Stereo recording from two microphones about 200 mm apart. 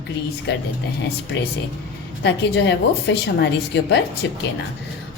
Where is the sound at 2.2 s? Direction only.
60° left (ahead or behind).